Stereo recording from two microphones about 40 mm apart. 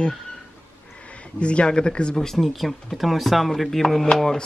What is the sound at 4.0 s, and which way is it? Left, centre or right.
Speech, centre.